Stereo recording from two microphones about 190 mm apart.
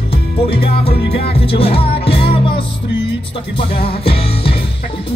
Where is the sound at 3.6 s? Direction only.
30° left (ahead or behind).